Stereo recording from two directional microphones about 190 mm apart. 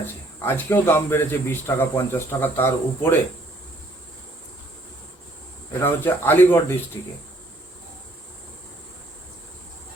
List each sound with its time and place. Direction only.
0.4 s a man's voice: 10° left (ahead or behind)
5.8 s a man's voice: 10° left (ahead or behind)